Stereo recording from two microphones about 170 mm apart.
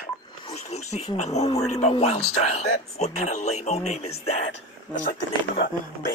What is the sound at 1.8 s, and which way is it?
Speech, 40° left (ahead or behind).